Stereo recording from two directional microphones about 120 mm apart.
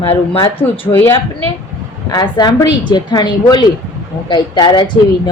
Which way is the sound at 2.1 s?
35° left (ahead or behind).